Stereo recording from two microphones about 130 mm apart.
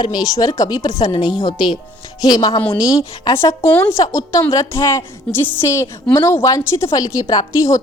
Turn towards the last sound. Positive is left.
turn(degrees=25)  # may be behind; listen again after turning